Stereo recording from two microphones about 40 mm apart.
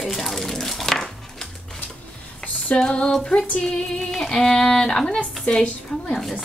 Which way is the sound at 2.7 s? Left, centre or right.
Centre.